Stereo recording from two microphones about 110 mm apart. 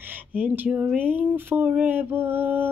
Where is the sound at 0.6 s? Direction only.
10° right (ahead or behind).